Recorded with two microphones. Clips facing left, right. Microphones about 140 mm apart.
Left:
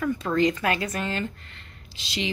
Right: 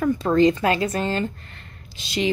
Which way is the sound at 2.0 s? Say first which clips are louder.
Right 6 dB; 50° right (ahead or behind).